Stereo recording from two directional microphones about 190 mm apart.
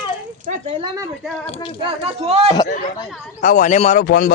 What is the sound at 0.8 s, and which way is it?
Speech, 20° right (ahead or behind).